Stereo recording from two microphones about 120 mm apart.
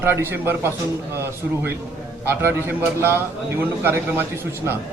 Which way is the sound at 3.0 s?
20° right (ahead or behind).